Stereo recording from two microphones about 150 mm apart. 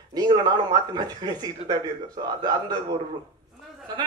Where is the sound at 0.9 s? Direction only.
25° right (ahead or behind).